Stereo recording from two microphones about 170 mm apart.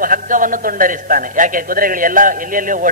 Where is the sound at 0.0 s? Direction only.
55° right (ahead or behind).